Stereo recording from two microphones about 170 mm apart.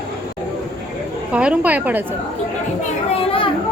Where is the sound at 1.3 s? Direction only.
5° right (ahead or behind).